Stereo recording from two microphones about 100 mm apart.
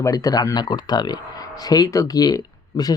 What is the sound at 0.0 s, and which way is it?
Speech, 35° left (ahead or behind).